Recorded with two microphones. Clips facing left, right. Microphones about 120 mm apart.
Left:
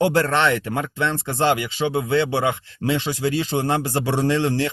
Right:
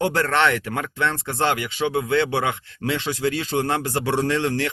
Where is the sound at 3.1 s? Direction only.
30° left (ahead or behind).